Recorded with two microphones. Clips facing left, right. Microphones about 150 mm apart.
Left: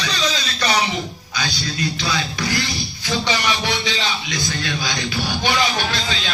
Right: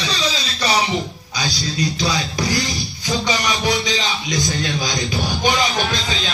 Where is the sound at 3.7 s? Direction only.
40° right (ahead or behind).